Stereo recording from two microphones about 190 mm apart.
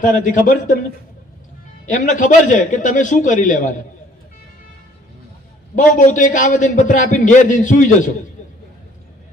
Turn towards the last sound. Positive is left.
turn(degrees=40)  # may be behind; listen again after turning